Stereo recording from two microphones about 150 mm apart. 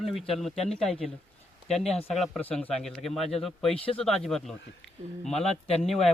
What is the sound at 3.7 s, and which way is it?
Speech, 40° left (ahead or behind).